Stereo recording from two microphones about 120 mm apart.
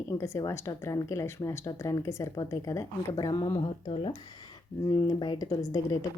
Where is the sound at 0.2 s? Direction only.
25° left (ahead or behind).